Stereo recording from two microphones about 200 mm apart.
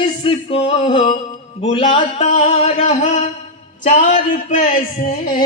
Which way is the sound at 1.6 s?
30° left (ahead or behind).